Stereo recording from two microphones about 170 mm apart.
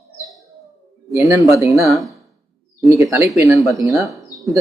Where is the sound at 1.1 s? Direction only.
20° right (ahead or behind).